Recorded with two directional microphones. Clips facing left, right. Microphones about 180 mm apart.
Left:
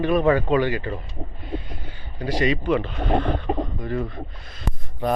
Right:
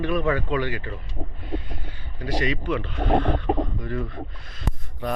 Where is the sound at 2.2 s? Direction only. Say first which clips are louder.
Left 4 dB; 25° left (ahead or behind).